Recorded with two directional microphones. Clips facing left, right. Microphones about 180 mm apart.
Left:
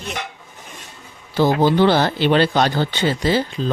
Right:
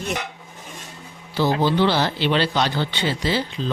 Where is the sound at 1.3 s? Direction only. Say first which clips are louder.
Left 4 dB; 50° left (ahead or behind).